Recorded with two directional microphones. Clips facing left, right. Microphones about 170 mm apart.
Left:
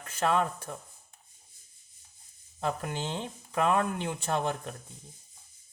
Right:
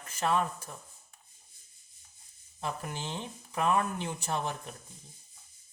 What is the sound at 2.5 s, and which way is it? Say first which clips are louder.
Speech: left 5 dB; 60° left (ahead or behind).